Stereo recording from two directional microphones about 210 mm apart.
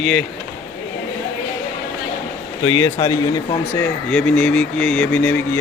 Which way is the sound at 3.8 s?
5° left (ahead or behind).